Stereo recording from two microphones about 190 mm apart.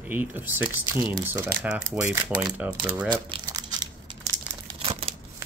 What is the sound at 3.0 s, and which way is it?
Crumpling, 25° right (ahead or behind).